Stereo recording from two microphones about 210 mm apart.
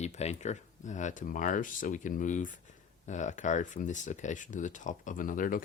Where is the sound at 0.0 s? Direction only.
30° left (ahead or behind).